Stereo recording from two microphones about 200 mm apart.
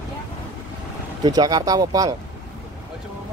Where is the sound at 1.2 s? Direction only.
20° right (ahead or behind).